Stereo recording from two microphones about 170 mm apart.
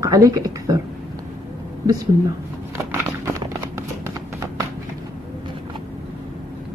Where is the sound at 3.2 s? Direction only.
15° right (ahead or behind).